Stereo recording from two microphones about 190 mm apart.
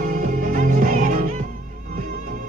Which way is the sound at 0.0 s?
50° right (ahead or behind).